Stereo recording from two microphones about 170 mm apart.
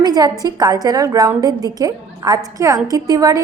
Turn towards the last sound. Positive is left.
turn(degrees=-20)  # may be behind; listen again after turning